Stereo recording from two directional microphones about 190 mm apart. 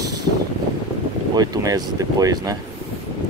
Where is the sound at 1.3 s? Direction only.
20° right (ahead or behind).